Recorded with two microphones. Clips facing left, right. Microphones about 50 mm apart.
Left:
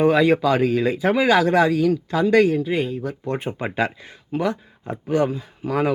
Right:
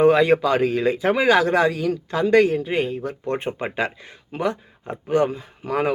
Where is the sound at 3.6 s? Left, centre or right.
Right.